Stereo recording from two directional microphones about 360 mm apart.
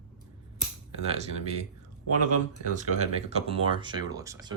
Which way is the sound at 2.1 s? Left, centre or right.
Right.